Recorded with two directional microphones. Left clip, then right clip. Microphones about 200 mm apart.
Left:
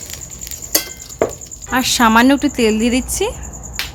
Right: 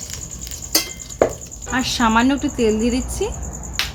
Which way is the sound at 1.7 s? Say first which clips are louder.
Left 5 dB; 35° left (ahead or behind).